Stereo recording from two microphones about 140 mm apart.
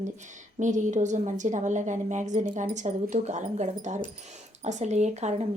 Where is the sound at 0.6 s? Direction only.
60° right (ahead or behind).